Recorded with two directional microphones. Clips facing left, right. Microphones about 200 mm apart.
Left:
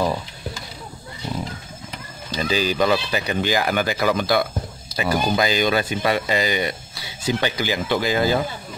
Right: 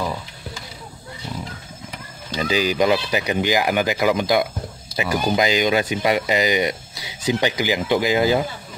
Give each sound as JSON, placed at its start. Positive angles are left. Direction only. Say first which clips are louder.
{"t": 2.3, "sound": "speech", "louder": "right 1 dB", "side_deg": -15}